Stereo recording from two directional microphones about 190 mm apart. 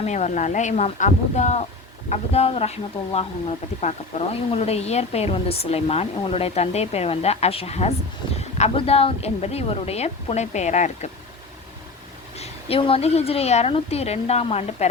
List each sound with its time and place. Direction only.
0.0 s speech: 40° left (ahead or behind)
12.4 s speech: 30° left (ahead or behind)